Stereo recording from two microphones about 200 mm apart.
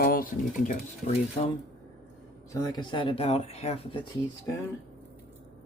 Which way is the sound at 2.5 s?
20° left (ahead or behind).